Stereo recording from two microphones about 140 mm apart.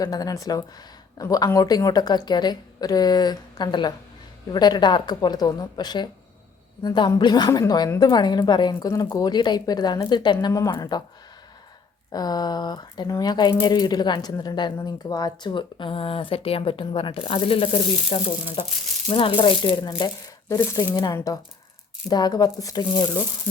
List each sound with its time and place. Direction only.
0.0 s a woman's voice: 25° left (ahead or behind)
12.1 s a woman's voice: 30° left (ahead or behind)